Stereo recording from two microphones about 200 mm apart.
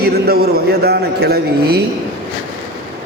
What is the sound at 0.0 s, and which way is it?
A man's voice, 50° right (ahead or behind).